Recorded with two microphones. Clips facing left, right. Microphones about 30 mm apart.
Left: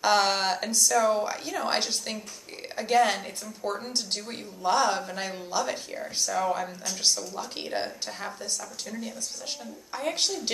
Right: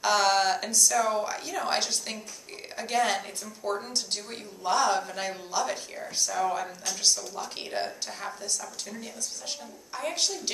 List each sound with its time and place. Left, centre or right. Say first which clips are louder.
0.0 s a sound: even; centre
0.7 s a woman's voice: left 4 dB; centre
9.9 s a woman's voice: left 2 dB; centre